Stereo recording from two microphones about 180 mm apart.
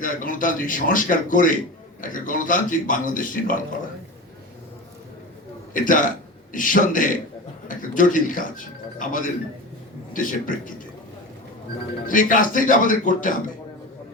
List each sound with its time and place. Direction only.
0.0 s a man's voice: 50° left (ahead or behind)
5.7 s a man's voice: 50° left (ahead or behind)
12.0 s a man's voice: 50° left (ahead or behind)